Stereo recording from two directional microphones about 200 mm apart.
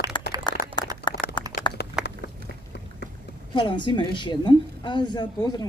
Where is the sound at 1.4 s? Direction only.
20° right (ahead or behind).